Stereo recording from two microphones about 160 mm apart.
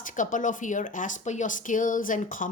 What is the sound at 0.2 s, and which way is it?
Speech, 55° left (ahead or behind).